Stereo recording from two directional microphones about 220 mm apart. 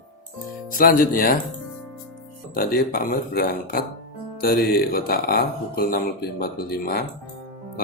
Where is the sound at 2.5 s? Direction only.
40° left (ahead or behind).